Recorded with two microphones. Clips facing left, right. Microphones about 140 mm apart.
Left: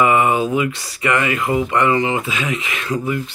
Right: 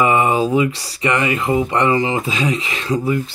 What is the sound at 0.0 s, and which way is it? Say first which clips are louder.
Speech: even; 30° right (ahead or behind).